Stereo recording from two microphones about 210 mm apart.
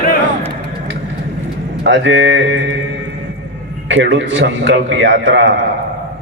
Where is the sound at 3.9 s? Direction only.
60° right (ahead or behind).